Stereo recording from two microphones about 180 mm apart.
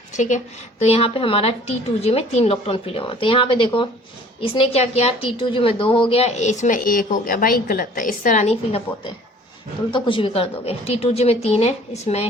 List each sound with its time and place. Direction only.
0.1 s a woman's voice: 40° left (ahead or behind)